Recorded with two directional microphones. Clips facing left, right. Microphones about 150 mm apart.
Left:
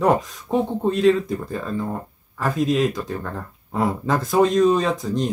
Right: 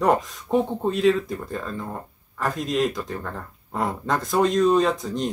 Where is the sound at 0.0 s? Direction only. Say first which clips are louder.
Left 2 dB; centre (ahead or behind).